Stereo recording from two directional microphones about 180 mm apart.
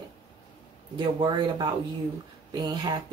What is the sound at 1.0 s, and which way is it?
Speech, 25° right (ahead or behind).